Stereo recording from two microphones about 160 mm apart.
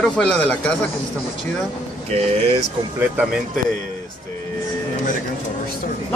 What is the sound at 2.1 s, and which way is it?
Speech, 40° right (ahead or behind).